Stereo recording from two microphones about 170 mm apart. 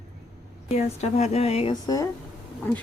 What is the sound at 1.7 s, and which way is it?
Speech, 20° left (ahead or behind).